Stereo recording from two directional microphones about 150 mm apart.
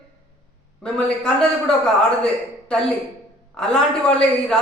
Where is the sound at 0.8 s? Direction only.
5° left (ahead or behind).